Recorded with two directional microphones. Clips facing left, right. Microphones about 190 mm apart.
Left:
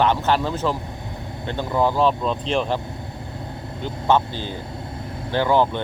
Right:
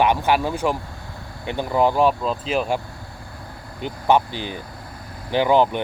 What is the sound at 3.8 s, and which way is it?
Speech, 15° right (ahead or behind).